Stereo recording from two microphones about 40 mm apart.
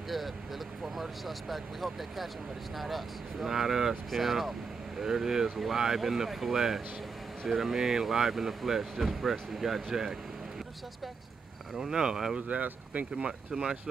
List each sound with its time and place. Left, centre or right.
0.9 s speech: centre
11.7 s speech: centre
12.4 s speech: right